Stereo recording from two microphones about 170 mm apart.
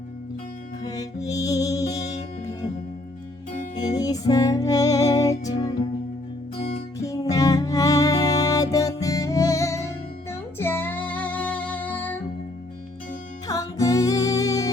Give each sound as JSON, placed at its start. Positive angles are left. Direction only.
{"t": 0.9, "sound": "music", "side_deg": 20}
{"t": 3.8, "sound": "music", "side_deg": 20}
{"t": 7.0, "sound": "music", "side_deg": 20}
{"t": 10.6, "sound": "female singing", "side_deg": 10}
{"t": 13.5, "sound": "music", "side_deg": 20}